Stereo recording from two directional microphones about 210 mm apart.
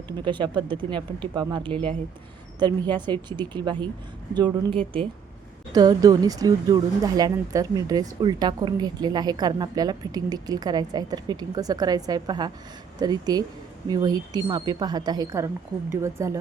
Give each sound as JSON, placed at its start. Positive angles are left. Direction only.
{"t": 0.3, "sound": "speech", "side_deg": -20}